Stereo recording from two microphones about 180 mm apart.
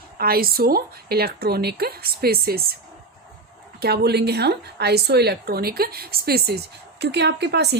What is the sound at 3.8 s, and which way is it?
A woman's voice, 65° right (ahead or behind).